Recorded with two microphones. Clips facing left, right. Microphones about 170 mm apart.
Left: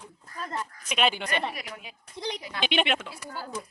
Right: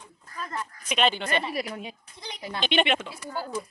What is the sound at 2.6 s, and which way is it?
Speech, 5° left (ahead or behind).